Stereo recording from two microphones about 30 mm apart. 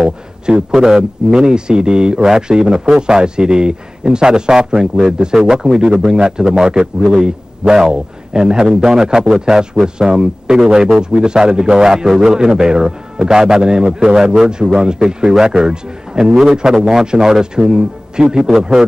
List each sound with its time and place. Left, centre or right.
0.0 s a man's voice: right